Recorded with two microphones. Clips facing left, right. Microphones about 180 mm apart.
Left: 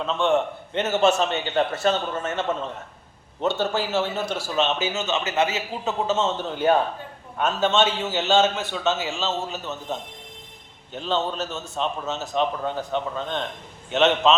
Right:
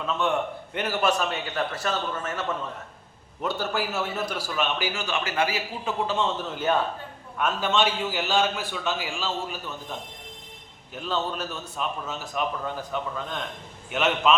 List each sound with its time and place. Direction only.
0.1 s a man's voice: 25° left (ahead or behind)
10.9 s a man's voice: 25° left (ahead or behind)